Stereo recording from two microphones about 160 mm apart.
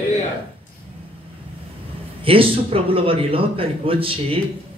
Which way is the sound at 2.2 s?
35° right (ahead or behind).